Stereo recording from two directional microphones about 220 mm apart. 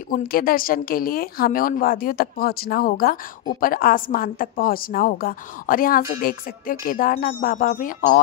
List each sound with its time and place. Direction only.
0.1 s a woman's voice: 40° left (ahead or behind)